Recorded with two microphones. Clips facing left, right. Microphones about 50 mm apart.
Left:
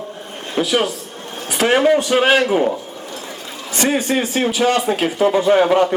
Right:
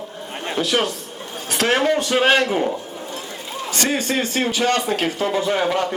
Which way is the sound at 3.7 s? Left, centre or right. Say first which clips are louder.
Left 4 dB; centre.